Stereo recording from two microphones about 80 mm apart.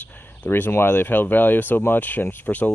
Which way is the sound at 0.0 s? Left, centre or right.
Left.